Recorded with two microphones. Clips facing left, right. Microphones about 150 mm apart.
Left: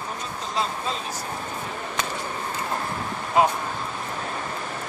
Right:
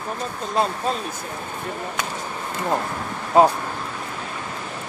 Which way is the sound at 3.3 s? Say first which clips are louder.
Right 5 dB; 35° right (ahead or behind).